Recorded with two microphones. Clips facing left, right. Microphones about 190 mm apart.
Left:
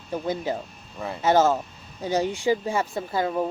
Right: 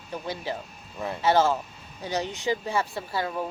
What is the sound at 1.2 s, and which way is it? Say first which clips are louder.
Speech: left 2 dB; 45° left (ahead or behind).